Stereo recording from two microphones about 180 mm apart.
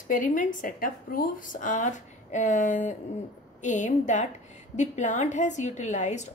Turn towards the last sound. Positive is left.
turn(degrees=40)  # may be behind; listen again after turning